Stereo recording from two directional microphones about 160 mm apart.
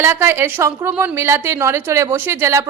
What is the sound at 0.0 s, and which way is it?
A woman's voice, 15° right (ahead or behind).